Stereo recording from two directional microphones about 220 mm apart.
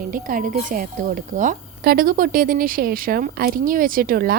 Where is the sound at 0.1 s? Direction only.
40° right (ahead or behind).